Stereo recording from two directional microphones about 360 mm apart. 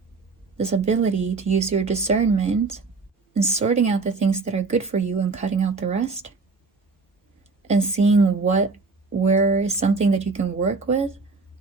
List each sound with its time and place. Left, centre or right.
0.5 s speech: centre
7.7 s speech: centre